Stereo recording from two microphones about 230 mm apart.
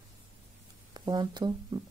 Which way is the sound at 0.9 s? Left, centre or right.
Centre.